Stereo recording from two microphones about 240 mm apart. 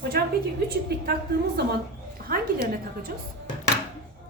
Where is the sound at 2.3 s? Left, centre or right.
Right.